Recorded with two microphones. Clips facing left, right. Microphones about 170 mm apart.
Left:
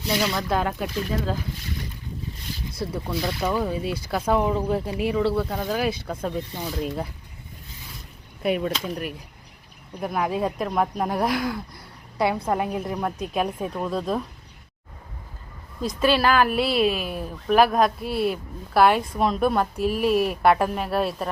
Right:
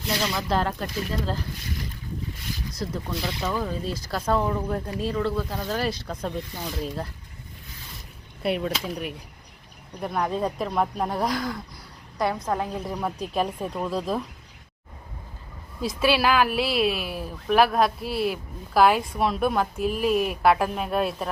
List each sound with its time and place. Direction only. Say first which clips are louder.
0.2 s speech: even; centre (ahead or behind)
2.8 s speech: left 3 dB; 5° left (ahead or behind)
5.3 s speech: left 3 dB; 5° left (ahead or behind)
8.4 s speech: left 2 dB; centre (ahead or behind)
15.8 s speech: left 1 dB; 5° right (ahead or behind)